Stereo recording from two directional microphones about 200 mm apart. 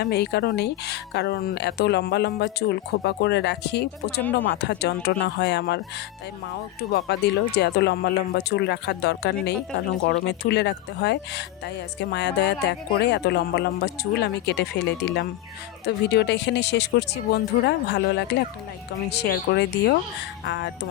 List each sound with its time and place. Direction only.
0.0 s speech: 55° left (ahead or behind)
6.9 s speech: 55° left (ahead or behind)